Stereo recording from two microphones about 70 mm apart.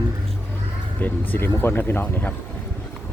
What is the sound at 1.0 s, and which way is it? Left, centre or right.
Speech, left.